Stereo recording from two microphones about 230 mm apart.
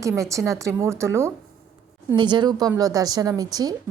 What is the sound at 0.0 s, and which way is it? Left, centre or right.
Speech, centre.